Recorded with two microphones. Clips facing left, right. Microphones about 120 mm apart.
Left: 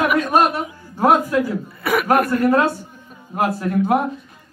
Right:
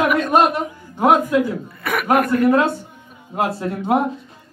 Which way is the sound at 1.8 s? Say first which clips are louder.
Left 4 dB; 5° left (ahead or behind).